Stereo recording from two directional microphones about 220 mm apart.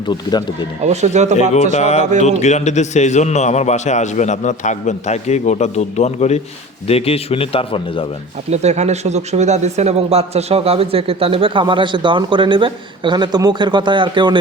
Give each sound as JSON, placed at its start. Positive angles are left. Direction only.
{"t": 0.1, "sound": "a man's voice", "side_deg": 20}
{"t": 0.9, "sound": "speech", "side_deg": -30}
{"t": 1.7, "sound": "a man's voice", "side_deg": 30}
{"t": 8.4, "sound": "speech", "side_deg": -30}